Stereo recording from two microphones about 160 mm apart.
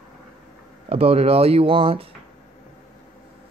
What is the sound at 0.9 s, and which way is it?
Speech, 40° right (ahead or behind).